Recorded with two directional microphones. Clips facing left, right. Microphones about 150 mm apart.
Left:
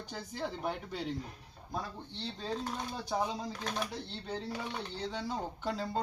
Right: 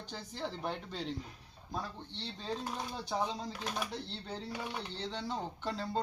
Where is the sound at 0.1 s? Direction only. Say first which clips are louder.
Left 2 dB; 10° left (ahead or behind).